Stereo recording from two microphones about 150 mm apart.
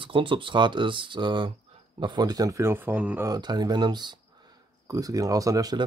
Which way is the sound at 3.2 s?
25° right (ahead or behind).